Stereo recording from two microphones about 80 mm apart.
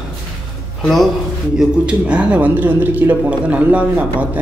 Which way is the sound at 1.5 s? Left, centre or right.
Centre.